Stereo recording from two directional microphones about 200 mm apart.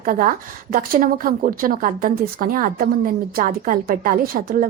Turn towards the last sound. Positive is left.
turn(degrees=-45)  # may be behind; listen again after turning